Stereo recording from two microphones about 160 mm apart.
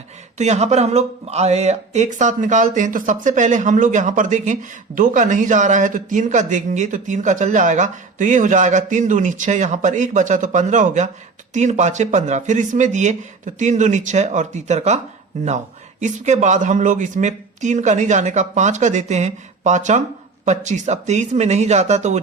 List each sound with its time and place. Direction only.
0.3 s speech: 45° right (ahead or behind)